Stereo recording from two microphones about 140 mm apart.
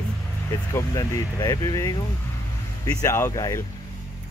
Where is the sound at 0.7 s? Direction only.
25° left (ahead or behind).